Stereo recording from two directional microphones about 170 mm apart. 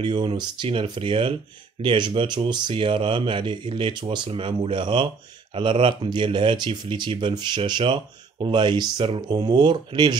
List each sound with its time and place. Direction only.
0.0 s speech: 30° right (ahead or behind)